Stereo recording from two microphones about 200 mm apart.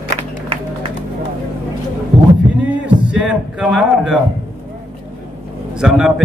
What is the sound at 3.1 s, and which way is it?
A man's voice, 5° right (ahead or behind).